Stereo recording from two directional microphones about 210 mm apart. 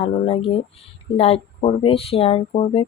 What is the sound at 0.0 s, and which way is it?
Speech, 25° left (ahead or behind).